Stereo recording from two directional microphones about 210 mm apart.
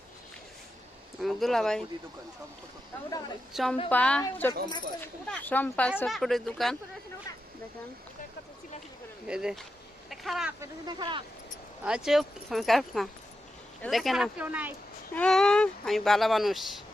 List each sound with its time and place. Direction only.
1.2 s speech: centre (ahead or behind)
3.5 s speech: centre (ahead or behind)
9.2 s speech: 5° right (ahead or behind)
10.6 s speech: 20° right (ahead or behind)
11.9 s speech: 5° right (ahead or behind)
15.1 s speech: 5° left (ahead or behind)